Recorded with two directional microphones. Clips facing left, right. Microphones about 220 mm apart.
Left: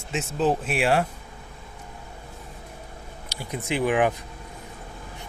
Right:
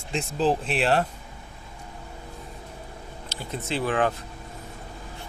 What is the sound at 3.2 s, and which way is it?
Speech, 10° left (ahead or behind).